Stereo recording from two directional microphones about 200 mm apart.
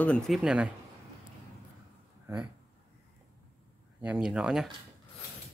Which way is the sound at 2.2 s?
5° right (ahead or behind).